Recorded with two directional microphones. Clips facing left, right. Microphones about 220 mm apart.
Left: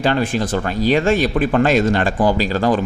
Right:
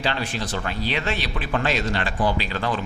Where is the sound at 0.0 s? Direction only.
50° left (ahead or behind).